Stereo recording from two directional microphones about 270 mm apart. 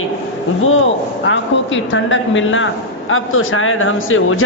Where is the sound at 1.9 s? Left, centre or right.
Left.